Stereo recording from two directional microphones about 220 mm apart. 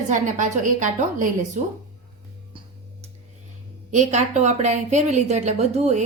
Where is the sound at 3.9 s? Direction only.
30° right (ahead or behind).